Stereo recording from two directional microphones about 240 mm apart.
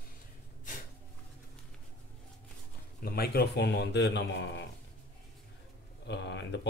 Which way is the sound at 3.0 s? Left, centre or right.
Left.